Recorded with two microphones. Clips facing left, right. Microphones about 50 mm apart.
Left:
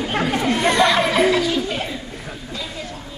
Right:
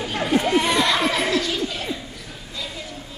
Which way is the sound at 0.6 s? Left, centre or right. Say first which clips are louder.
Left 3 dB; left.